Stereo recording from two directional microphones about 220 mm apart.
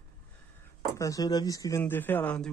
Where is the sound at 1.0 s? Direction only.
15° left (ahead or behind).